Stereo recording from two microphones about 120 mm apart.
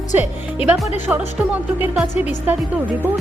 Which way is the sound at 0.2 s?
15° right (ahead or behind).